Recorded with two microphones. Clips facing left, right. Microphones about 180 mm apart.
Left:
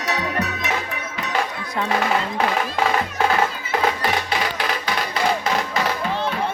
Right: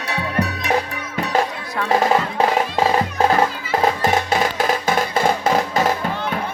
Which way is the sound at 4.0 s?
45° right (ahead or behind).